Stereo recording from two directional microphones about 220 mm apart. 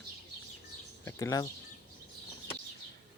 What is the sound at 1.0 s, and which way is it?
Speech, 15° left (ahead or behind).